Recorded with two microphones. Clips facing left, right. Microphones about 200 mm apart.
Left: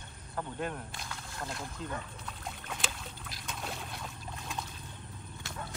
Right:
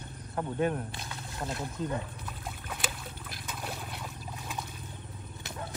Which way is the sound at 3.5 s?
5° right (ahead or behind).